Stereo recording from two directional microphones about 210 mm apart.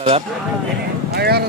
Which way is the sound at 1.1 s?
50° right (ahead or behind).